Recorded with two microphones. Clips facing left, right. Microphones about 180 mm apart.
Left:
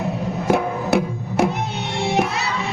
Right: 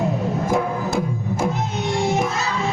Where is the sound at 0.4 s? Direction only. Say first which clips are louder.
Left 5 dB; 70° left (ahead or behind).